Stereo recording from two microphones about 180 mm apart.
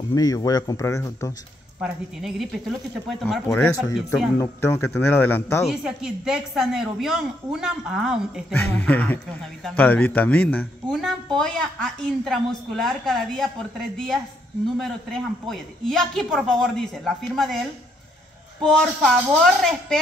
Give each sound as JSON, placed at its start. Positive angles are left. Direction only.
{"t": 0.1, "sound": "speech", "side_deg": 20}
{"t": 1.8, "sound": "a woman's voice", "side_deg": 0}
{"t": 3.4, "sound": "a man's voice", "side_deg": 10}
{"t": 5.7, "sound": "a woman's voice", "side_deg": -5}
{"t": 8.5, "sound": "a man's voice", "side_deg": 10}
{"t": 18.6, "sound": "a woman's voice", "side_deg": 0}